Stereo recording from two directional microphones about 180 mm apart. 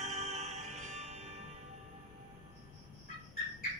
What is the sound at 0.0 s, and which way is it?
Music, 40° right (ahead or behind).